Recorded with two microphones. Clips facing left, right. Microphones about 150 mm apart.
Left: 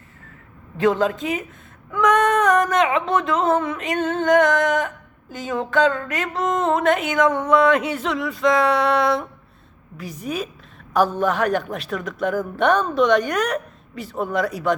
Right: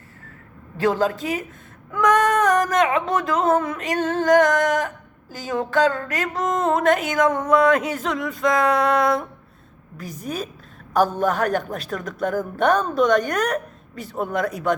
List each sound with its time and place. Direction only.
0.8 s speech: 35° right (ahead or behind)